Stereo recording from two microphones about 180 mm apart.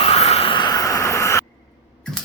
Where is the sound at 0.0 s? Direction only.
35° left (ahead or behind); by 1.5 s 15° left (ahead or behind).